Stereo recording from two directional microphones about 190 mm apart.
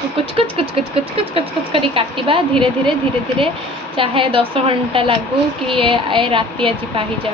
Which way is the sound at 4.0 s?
30° right (ahead or behind).